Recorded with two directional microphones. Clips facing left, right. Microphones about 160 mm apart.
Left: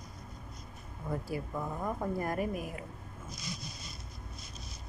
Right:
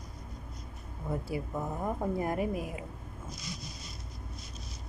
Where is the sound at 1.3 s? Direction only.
20° right (ahead or behind).